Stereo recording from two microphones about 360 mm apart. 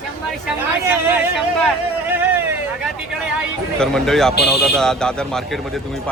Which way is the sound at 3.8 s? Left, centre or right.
Centre.